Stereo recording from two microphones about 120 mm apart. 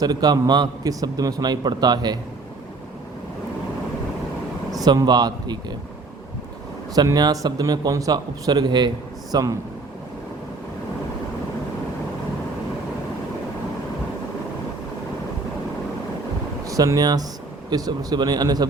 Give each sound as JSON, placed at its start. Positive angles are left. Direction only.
{"t": 0.0, "sound": "a man's voice", "side_deg": -35}
{"t": 4.8, "sound": "a man's voice", "side_deg": -35}
{"t": 6.9, "sound": "a man's voice", "side_deg": -35}
{"t": 16.6, "sound": "a man's voice", "side_deg": -30}